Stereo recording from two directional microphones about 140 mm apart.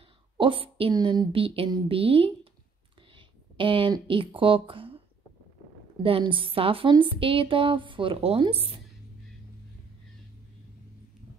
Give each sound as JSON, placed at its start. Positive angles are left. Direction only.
{"t": 0.4, "sound": "a woman's voice", "side_deg": -40}
{"t": 0.9, "sound": "a woman's voice", "side_deg": -30}
{"t": 6.0, "sound": "a woman's voice", "side_deg": -40}